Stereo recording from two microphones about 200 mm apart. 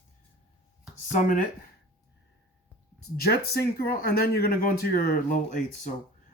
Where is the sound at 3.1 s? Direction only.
50° left (ahead or behind).